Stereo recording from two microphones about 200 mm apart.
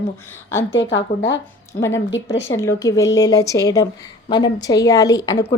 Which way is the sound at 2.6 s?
15° left (ahead or behind).